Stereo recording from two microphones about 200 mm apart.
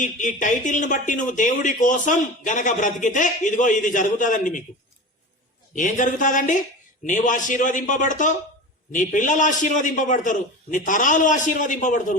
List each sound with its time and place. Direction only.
0.0 s speech: 40° left (ahead or behind)
5.7 s speech: 40° left (ahead or behind)